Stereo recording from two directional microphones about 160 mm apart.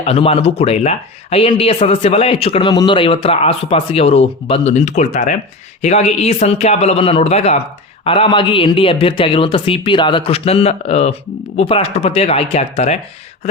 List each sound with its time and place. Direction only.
0.0 s speech: 40° left (ahead or behind)